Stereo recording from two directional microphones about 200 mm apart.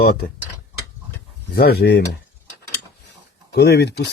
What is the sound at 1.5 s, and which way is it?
Speech, 50° left (ahead or behind).